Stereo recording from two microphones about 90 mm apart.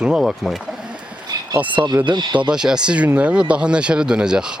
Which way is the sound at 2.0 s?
65° right (ahead or behind).